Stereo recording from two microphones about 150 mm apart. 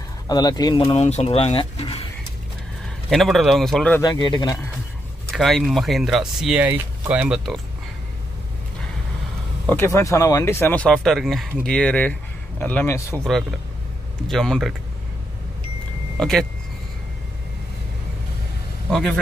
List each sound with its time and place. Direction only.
0.3 s speech: 25° left (ahead or behind)
0.9 s speech: 45° left (ahead or behind)
3.1 s speech: centre (ahead or behind)
4.0 s speech: 30° left (ahead or behind)
5.3 s speech: centre (ahead or behind)
9.7 s speech: 15° left (ahead or behind)
14.2 s speech: 5° left (ahead or behind)
16.2 s speech: 5° left (ahead or behind)
18.9 s a man's voice: 5° left (ahead or behind)